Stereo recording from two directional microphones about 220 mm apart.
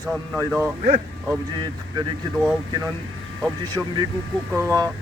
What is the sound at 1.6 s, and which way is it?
Speech, 20° right (ahead or behind).